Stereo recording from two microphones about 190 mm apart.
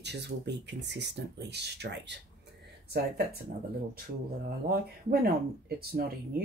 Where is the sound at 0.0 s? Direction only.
60° right (ahead or behind).